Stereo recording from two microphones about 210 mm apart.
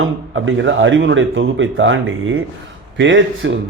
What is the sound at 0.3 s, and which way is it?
A man's voice, 65° right (ahead or behind).